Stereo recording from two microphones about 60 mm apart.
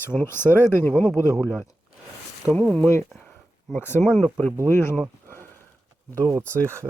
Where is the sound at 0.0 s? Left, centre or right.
Left.